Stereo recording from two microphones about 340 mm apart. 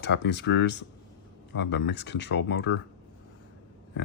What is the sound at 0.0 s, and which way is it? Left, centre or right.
Speech, left.